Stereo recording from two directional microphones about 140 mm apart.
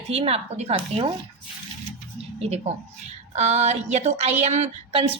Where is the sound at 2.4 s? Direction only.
50° right (ahead or behind).